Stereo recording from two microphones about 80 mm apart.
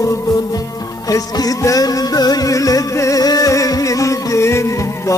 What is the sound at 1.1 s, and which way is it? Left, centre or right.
Music, left.